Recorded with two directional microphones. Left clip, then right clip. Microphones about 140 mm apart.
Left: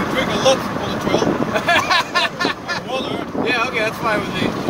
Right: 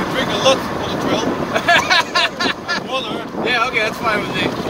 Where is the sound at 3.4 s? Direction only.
30° left (ahead or behind).